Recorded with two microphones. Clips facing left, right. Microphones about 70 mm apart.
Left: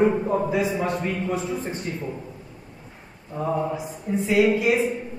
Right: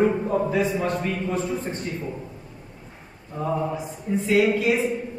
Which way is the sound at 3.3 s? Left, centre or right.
Centre.